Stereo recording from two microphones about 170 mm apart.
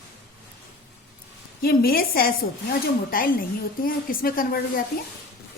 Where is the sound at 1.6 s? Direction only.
60° left (ahead or behind).